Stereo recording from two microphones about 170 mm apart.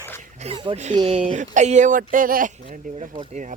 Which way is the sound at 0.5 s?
30° right (ahead or behind).